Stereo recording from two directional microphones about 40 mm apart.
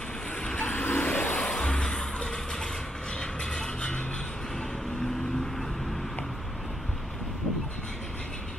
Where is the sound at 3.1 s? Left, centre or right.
Centre.